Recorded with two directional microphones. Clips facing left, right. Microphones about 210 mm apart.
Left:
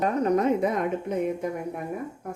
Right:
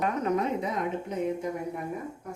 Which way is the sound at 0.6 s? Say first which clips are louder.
Left 5 dB; 55° left (ahead or behind).